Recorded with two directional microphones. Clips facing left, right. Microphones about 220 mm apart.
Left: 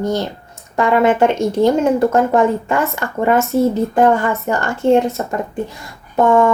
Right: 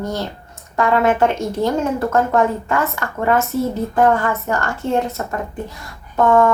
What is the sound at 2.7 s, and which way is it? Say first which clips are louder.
A woman's voice: left 2 dB; 25° left (ahead or behind).